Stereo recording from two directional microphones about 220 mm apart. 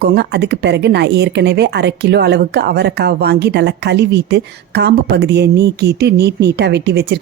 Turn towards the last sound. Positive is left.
turn(degrees=-50)  # may be behind; listen again after turning